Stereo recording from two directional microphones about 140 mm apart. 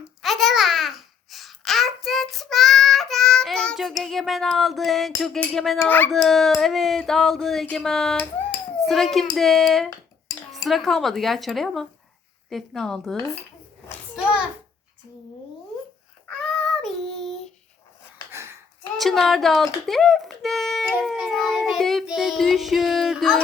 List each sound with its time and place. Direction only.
0.2 s babbling: centre (ahead or behind)
5.8 s speech: 15° left (ahead or behind)
6.1 s speech: centre (ahead or behind)
16.3 s child singing: 5° left (ahead or behind)
18.3 s a sound: 20° right (ahead or behind)
18.9 s music: centre (ahead or behind)